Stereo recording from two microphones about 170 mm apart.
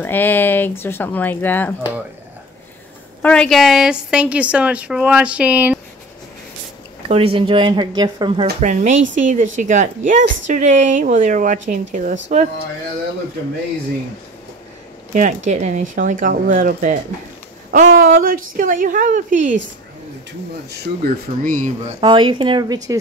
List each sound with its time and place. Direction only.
0.0 s speech: 10° left (ahead or behind)
3.2 s a woman's voice: 5° left (ahead or behind)
7.1 s speech: 35° right (ahead or behind)
8.5 s a woman's voice: 45° right (ahead or behind)
15.1 s a woman's voice: 45° right (ahead or behind)
20.7 s a woman's voice: 55° right (ahead or behind)
22.0 s speech: 30° right (ahead or behind)